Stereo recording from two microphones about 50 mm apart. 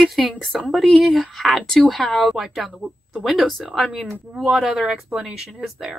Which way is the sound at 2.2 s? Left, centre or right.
Centre.